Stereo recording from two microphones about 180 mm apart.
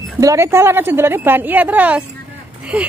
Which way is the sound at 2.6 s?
5° right (ahead or behind).